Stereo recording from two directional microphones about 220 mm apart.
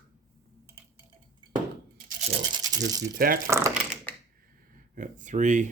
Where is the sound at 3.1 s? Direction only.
40° right (ahead or behind).